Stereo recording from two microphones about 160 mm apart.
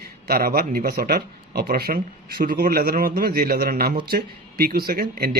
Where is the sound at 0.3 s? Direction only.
70° right (ahead or behind).